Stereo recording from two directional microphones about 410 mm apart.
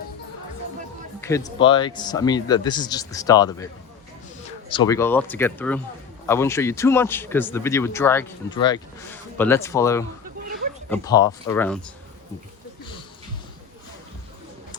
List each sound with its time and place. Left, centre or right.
1.2 s a man's voice: centre
4.7 s a man's voice: centre